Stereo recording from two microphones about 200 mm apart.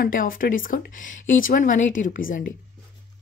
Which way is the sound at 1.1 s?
75° left (ahead or behind).